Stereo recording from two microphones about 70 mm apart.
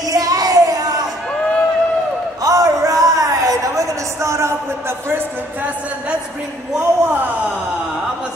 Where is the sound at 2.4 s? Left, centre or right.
Right; by 6.2 s centre.